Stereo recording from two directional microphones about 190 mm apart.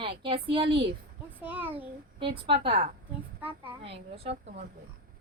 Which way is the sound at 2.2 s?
25° right (ahead or behind).